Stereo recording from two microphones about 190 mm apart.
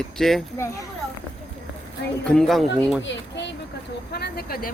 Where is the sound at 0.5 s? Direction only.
15° left (ahead or behind).